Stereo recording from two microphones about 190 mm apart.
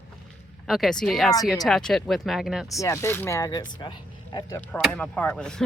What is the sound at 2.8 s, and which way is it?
Speech, 15° left (ahead or behind).